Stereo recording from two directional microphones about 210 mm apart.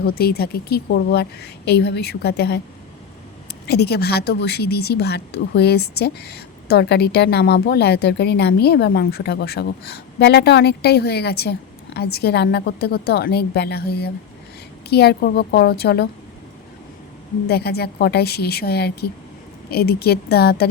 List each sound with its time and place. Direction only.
0.0 s a woman's voice: 45° left (ahead or behind)
3.7 s a woman's voice: 50° left (ahead or behind)
17.5 s a woman's voice: 50° left (ahead or behind)